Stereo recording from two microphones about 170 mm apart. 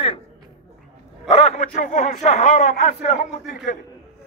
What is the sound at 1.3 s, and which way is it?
A man's voice, 40° left (ahead or behind).